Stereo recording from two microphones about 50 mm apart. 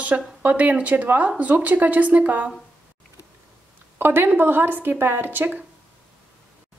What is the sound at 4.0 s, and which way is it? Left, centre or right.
Speech, right.